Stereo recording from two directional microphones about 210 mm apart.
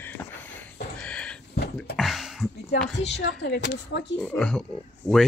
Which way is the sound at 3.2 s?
55° left (ahead or behind).